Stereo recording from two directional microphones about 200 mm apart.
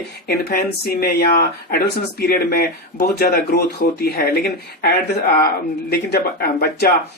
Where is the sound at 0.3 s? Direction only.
50° left (ahead or behind).